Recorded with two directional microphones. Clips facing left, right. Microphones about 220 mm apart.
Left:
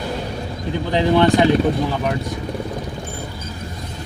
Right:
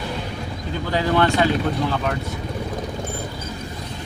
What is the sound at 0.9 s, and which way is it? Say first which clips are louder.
Speech: left 4 dB; 20° left (ahead or behind).